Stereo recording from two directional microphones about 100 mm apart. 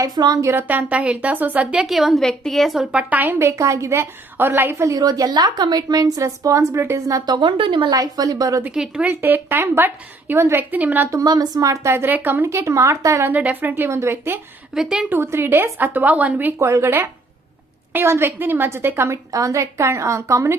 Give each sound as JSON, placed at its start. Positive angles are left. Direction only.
{"t": 0.0, "sound": "a woman's voice", "side_deg": -45}
{"t": 0.4, "sound": "a woman's voice", "side_deg": -20}
{"t": 2.9, "sound": "a woman's voice", "side_deg": -15}
{"t": 3.4, "sound": "a woman's voice", "side_deg": -30}
{"t": 7.3, "sound": "a woman's voice", "side_deg": -50}
{"t": 7.9, "sound": "a woman's voice", "side_deg": -40}
{"t": 8.7, "sound": "a woman's voice", "side_deg": -10}
{"t": 9.0, "sound": "a woman's voice", "side_deg": -20}
{"t": 11.1, "sound": "a woman's voice", "side_deg": -35}
{"t": 13.3, "sound": "a woman's voice", "side_deg": -15}
{"t": 14.8, "sound": "a woman's voice", "side_deg": -5}
{"t": 15.1, "sound": "a woman's voice", "side_deg": -25}